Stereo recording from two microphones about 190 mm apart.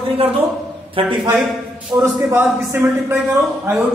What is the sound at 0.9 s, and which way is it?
Speech, 25° right (ahead or behind).